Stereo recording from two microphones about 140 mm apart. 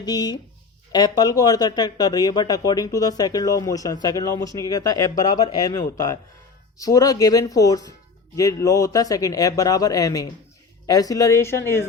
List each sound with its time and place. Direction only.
0.0 s speech: 30° left (ahead or behind)
6.7 s speech: 25° left (ahead or behind)